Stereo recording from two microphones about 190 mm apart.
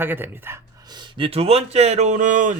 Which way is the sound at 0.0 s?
10° right (ahead or behind).